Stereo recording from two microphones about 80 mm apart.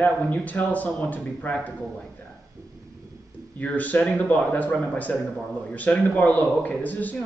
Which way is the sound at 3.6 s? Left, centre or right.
Centre.